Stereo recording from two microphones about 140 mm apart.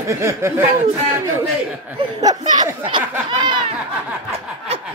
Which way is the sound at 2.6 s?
35° right (ahead or behind).